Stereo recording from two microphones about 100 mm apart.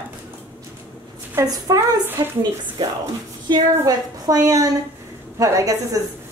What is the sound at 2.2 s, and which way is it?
Speech, 40° right (ahead or behind).